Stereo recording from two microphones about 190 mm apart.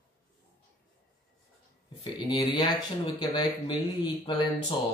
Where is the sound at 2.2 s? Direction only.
25° left (ahead or behind).